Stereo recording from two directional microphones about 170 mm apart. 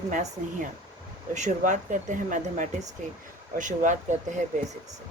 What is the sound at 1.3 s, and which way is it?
Speech, 45° right (ahead or behind).